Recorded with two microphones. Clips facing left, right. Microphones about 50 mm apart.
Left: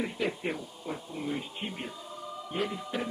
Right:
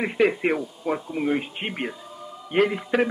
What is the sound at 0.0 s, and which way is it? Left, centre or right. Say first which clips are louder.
Speech: right 10 dB; right.